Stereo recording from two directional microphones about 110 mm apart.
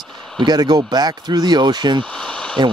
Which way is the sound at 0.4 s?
40° right (ahead or behind).